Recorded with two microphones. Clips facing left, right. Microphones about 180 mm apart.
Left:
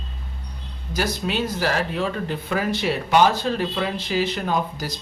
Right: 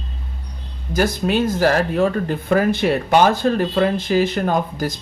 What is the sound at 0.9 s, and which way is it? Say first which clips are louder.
Speech: right 6 dB; 50° right (ahead or behind).